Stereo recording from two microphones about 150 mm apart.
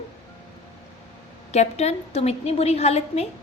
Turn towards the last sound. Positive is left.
turn(degrees=45)  # may be behind; listen again after turning